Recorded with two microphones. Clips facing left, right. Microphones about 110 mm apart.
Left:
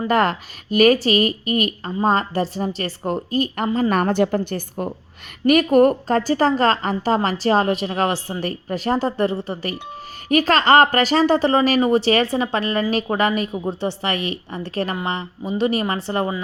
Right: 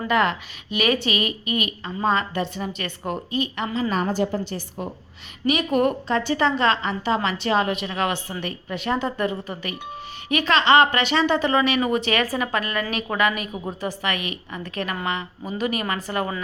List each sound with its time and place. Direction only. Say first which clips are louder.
0.1 s a woman's voice: left 2 dB; 40° left (ahead or behind)
3.8 s a woman's voice: left 5 dB; 60° left (ahead or behind); by 16.3 s 30° left (ahead or behind)